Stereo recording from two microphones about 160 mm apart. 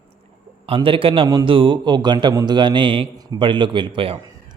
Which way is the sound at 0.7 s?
35° right (ahead or behind).